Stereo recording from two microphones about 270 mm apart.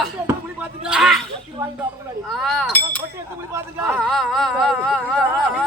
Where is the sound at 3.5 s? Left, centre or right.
Centre.